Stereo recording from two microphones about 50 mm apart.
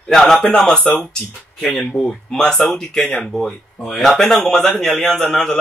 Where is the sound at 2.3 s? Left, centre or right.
Centre.